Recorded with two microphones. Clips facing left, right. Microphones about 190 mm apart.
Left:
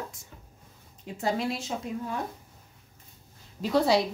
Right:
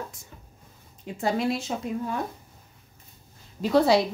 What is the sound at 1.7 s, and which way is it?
Speech, 65° right (ahead or behind).